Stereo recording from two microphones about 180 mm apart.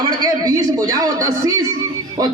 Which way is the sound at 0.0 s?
20° right (ahead or behind).